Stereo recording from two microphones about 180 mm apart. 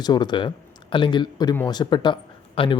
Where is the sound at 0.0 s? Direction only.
25° left (ahead or behind).